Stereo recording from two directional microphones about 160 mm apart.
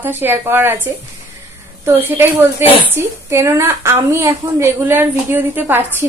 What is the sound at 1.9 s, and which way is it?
A woman's voice, 15° right (ahead or behind).